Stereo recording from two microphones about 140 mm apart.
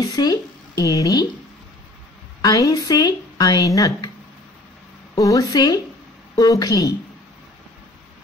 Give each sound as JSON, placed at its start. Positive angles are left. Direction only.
{"t": 0.1, "sound": "speech", "side_deg": 30}
{"t": 2.4, "sound": "speech", "side_deg": 25}
{"t": 5.2, "sound": "speech", "side_deg": 25}